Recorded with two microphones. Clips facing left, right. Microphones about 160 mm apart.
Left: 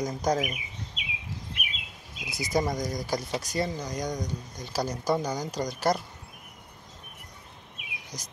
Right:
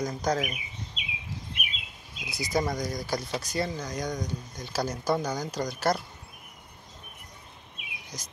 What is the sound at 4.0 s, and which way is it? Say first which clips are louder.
Speech: even; 15° left (ahead or behind).